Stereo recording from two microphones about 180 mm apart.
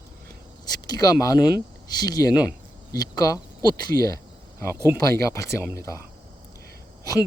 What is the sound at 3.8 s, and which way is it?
Speech, 60° right (ahead or behind).